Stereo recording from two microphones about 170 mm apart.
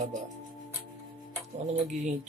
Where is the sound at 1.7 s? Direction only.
45° right (ahead or behind).